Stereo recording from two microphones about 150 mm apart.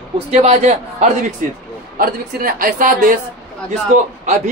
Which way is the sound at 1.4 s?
60° right (ahead or behind).